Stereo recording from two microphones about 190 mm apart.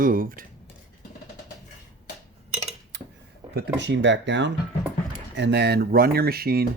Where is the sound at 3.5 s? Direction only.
65° right (ahead or behind).